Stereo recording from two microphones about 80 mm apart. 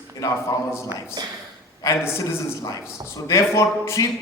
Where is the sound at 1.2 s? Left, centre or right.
Right.